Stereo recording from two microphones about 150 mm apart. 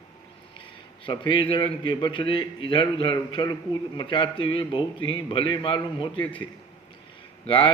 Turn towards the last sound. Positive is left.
turn(degrees=35)  # may be behind; listen again after turning